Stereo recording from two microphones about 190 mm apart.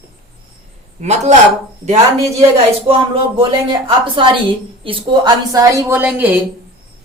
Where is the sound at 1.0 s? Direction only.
35° right (ahead or behind).